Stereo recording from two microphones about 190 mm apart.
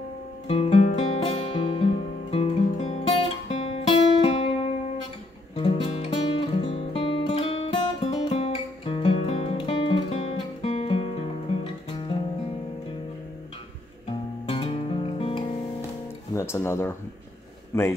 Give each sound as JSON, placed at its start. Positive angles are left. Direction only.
{"t": 0.5, "sound": "music", "side_deg": 30}
{"t": 8.3, "sound": "guitar", "side_deg": 30}
{"t": 14.5, "sound": "music", "side_deg": 30}
{"t": 16.3, "sound": "a man's voice", "side_deg": 15}